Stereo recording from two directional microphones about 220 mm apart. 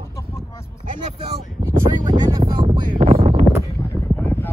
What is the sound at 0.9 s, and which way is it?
Speech, 30° right (ahead or behind).